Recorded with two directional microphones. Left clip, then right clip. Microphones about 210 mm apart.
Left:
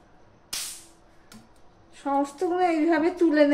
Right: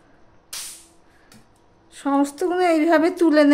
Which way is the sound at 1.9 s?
55° right (ahead or behind).